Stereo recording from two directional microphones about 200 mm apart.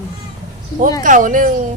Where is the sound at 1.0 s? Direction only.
40° right (ahead or behind).